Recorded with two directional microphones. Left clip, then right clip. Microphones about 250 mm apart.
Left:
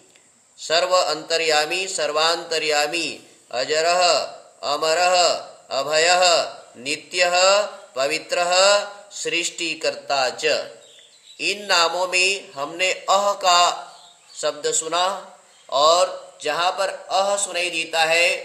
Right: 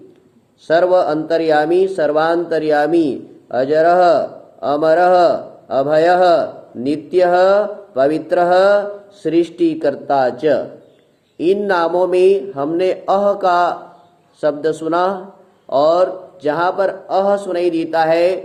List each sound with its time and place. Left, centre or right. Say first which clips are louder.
0.7 s a man's voice: right 6 dB; left
11.3 s a man's voice: right 5 dB; left
14.8 s a man's voice: right 5 dB; left